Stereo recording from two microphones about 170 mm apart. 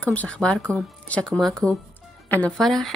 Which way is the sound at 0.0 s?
10° left (ahead or behind).